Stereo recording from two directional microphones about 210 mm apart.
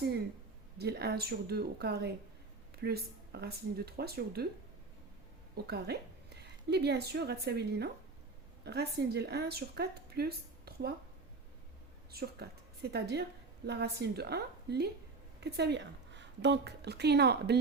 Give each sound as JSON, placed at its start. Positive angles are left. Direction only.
{"t": 0.8, "sound": "speech", "side_deg": -50}
{"t": 5.6, "sound": "a woman's voice", "side_deg": -50}
{"t": 12.1, "sound": "a woman's voice", "side_deg": -50}